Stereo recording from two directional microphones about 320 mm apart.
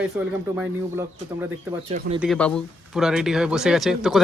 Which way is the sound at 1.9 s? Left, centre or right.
Centre.